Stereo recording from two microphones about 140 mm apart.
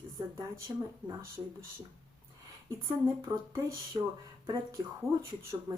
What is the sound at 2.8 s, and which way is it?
Speech, 25° right (ahead or behind).